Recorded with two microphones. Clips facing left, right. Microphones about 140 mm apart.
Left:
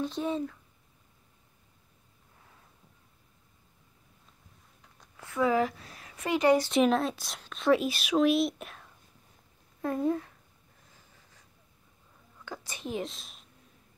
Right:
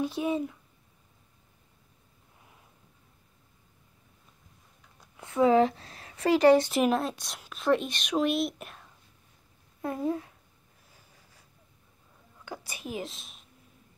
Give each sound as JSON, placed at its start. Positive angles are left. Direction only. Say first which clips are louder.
{"t": 0.0, "sound": "speech", "louder": "right 2 dB", "side_deg": -10}
{"t": 5.1, "sound": "speech", "louder": "right 5 dB", "side_deg": -25}
{"t": 6.7, "sound": "speech", "louder": "left 1 dB", "side_deg": -5}
{"t": 9.8, "sound": "a sound", "louder": "left 2 dB", "side_deg": -10}
{"t": 12.4, "sound": "a woman's voice", "louder": "left 1 dB", "side_deg": -10}